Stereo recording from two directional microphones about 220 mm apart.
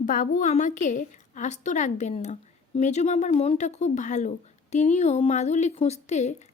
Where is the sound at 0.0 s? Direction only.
35° left (ahead or behind).